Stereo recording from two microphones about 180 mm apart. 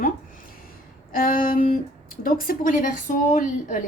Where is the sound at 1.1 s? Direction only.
50° left (ahead or behind).